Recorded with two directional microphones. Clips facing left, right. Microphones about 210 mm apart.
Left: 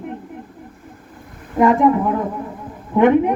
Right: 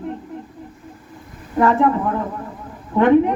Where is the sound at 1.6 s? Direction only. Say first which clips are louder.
Left 2 dB; 15° left (ahead or behind).